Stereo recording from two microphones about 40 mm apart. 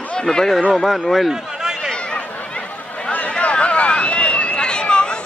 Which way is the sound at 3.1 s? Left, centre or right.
Left.